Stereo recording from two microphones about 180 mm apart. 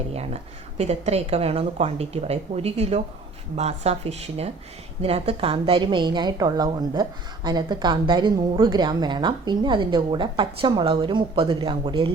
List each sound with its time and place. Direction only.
0.8 s a woman's voice: 35° right (ahead or behind)